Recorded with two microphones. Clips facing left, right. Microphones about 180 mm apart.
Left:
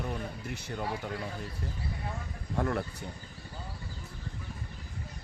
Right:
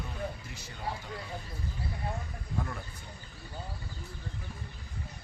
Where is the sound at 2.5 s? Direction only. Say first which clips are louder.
Left 7 dB; 65° left (ahead or behind).